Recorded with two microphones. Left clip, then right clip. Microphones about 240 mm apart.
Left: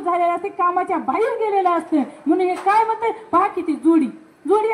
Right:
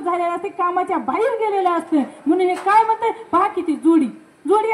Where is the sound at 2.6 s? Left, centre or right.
Right.